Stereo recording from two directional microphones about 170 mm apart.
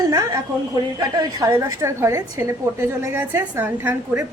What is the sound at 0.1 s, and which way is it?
A woman's voice, 20° right (ahead or behind).